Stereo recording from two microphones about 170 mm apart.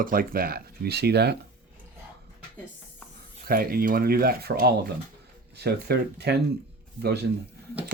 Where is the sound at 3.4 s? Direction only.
60° right (ahead or behind).